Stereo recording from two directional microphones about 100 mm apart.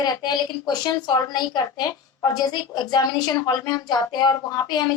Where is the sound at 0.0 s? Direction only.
45° left (ahead or behind).